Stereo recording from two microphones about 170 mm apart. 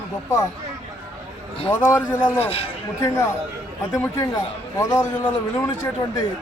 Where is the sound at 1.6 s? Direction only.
15° left (ahead or behind).